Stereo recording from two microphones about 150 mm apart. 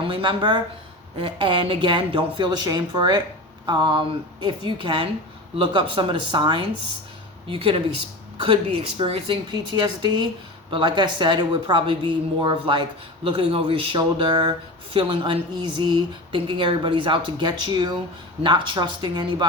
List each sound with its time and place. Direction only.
0.0 s speech: 35° right (ahead or behind)
9.0 s speech: 40° right (ahead or behind)